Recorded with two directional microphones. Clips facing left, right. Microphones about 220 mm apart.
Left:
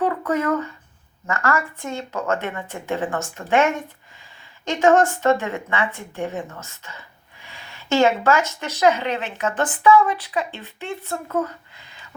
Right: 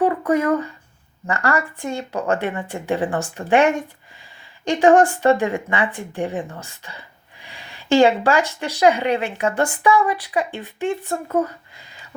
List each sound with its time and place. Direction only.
0.3 s speech: 15° right (ahead or behind)